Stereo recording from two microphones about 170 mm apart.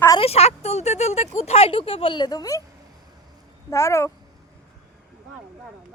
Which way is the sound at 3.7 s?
15° left (ahead or behind).